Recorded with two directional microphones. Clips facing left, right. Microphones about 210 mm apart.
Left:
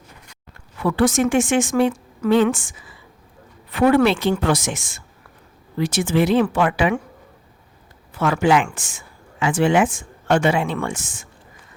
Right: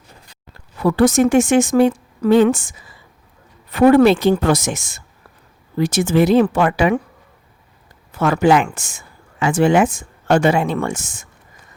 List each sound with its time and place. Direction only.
0.3 s speech: 35° right (ahead or behind)
8.2 s speech: 40° right (ahead or behind)